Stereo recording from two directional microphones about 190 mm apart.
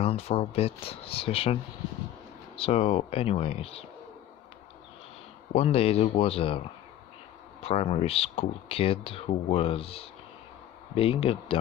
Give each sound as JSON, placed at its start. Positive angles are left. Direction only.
{"t": 0.0, "sound": "speech", "side_deg": 30}
{"t": 5.5, "sound": "speech", "side_deg": 30}
{"t": 7.6, "sound": "a man's voice", "side_deg": 30}